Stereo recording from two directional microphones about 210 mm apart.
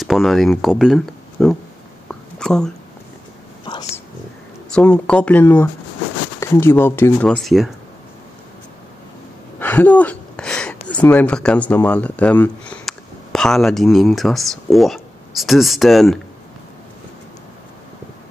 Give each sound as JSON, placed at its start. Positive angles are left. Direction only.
{"t": 0.0, "sound": "speech", "side_deg": 0}
{"t": 3.7, "sound": "whispering", "side_deg": 20}
{"t": 4.7, "sound": "speech", "side_deg": 5}
{"t": 9.6, "sound": "speech", "side_deg": 10}